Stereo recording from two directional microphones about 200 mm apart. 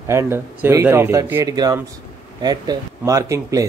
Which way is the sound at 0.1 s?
15° right (ahead or behind).